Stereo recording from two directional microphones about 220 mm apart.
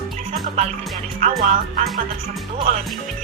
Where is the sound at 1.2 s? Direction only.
30° right (ahead or behind).